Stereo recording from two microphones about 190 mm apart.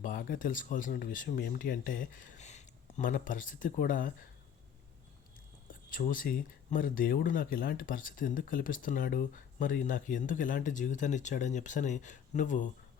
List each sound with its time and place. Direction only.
0.0 s speech: 45° left (ahead or behind)
5.9 s speech: 45° left (ahead or behind)